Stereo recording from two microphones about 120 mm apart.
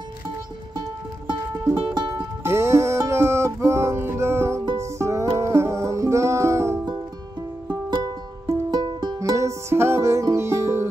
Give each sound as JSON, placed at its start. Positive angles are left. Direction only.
{"t": 2.0, "sound": "music", "side_deg": -40}
{"t": 2.4, "sound": "music", "side_deg": -20}
{"t": 8.5, "sound": "music", "side_deg": -35}